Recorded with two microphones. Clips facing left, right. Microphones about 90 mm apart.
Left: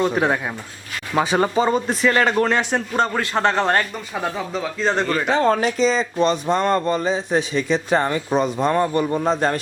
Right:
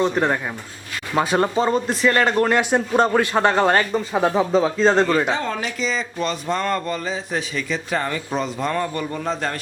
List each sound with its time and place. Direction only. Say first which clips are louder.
0.0 s speech: even; 5° left (ahead or behind)
3.9 s speech: right 7 dB; 25° right (ahead or behind)
5.3 s speech: left 6 dB; 45° left (ahead or behind)
5.8 s speech: left 5 dB; 30° left (ahead or behind)